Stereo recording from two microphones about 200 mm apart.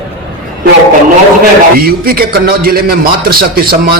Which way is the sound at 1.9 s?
50° right (ahead or behind).